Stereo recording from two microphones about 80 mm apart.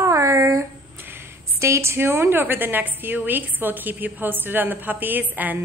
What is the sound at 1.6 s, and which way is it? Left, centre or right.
A woman's voice, right.